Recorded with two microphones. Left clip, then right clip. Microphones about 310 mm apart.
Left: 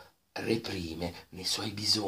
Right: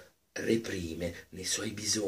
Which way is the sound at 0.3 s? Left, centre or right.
Centre.